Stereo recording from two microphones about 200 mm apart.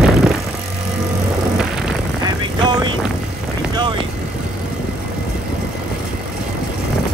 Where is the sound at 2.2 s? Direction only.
20° right (ahead or behind).